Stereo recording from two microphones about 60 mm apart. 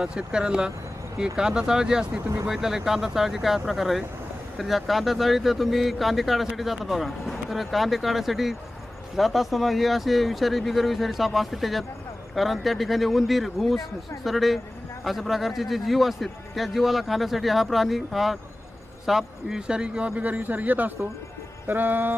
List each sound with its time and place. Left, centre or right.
0.0 s a man's voice: centre; by 22.1 s right